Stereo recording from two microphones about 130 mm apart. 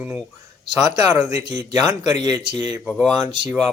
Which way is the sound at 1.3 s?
25° right (ahead or behind).